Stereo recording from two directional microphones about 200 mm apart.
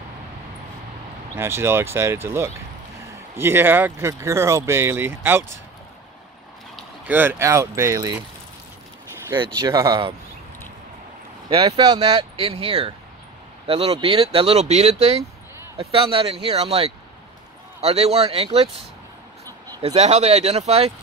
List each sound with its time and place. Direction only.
1.3 s speech: 10° right (ahead or behind)
6.8 s speech: 10° right (ahead or behind)
9.4 s speech: 20° right (ahead or behind)
11.4 s speech: 25° right (ahead or behind)
19.8 s speech: 30° right (ahead or behind)